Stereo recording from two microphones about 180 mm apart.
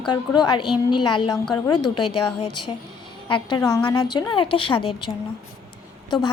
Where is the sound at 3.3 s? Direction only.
25° left (ahead or behind).